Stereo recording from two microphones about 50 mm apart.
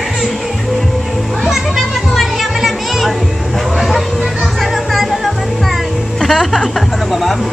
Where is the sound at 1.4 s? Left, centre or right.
Centre.